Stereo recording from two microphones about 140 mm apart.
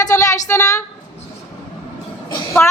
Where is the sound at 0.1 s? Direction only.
25° left (ahead or behind).